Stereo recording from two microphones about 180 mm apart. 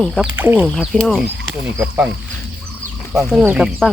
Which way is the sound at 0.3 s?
10° right (ahead or behind).